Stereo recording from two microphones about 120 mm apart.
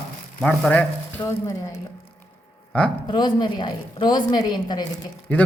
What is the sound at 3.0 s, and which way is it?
A woman's voice, 35° left (ahead or behind).